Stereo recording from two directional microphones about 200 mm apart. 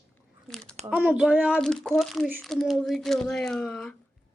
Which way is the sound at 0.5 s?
5° left (ahead or behind).